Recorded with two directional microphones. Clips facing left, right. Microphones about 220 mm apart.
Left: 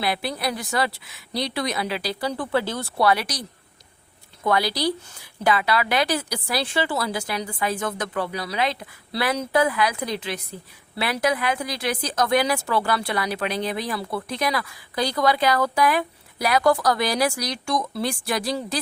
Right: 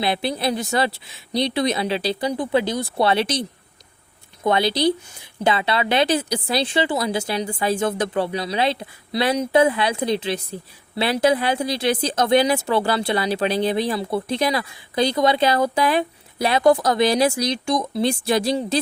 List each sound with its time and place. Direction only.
0.0 s a woman's voice: 25° right (ahead or behind)
2.3 s speech: 15° right (ahead or behind)
3.1 s a woman's voice: 25° right (ahead or behind)
4.4 s a woman's voice: 25° right (ahead or behind)